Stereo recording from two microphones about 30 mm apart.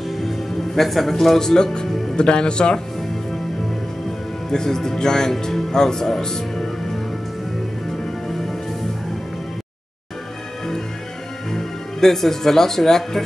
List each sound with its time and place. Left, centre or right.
0.2 s music: centre
1.4 s speech: left
4.5 s speech: left
11.5 s speech: centre